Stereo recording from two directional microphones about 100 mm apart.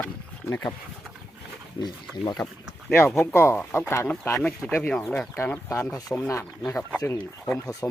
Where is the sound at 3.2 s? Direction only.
25° left (ahead or behind).